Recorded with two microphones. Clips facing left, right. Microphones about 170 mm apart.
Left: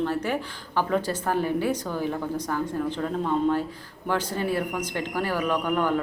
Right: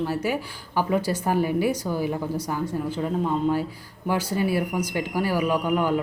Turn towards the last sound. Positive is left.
turn(degrees=-10)  # may be behind; listen again after turning